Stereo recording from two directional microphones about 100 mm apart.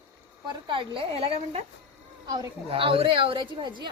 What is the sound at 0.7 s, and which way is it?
Speech, 60° right (ahead or behind).